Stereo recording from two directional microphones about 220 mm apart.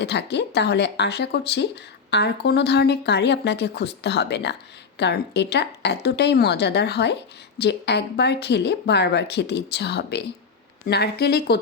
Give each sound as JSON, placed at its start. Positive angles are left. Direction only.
{"t": 0.0, "sound": "speech", "side_deg": 50}